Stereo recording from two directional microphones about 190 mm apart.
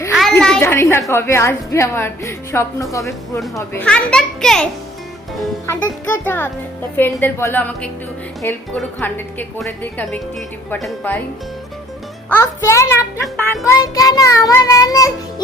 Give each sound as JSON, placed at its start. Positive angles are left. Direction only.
{"t": 0.1, "sound": "a sound", "side_deg": 0}
{"t": 1.1, "sound": "a child's voice", "side_deg": 15}
{"t": 12.3, "sound": "speech", "side_deg": 15}
{"t": 13.2, "sound": "a child's voice", "side_deg": 0}
{"t": 13.7, "sound": "speech", "side_deg": 20}